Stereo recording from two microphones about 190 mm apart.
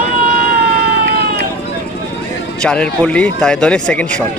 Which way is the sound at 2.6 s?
5° left (ahead or behind).